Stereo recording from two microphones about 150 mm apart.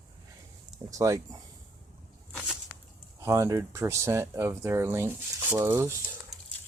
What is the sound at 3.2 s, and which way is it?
Speech, 20° right (ahead or behind).